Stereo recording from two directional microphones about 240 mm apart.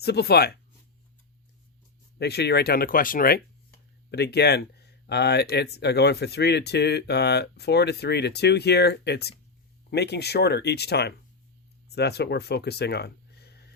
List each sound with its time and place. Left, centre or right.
0.0 s speech: left
2.1 s speech: left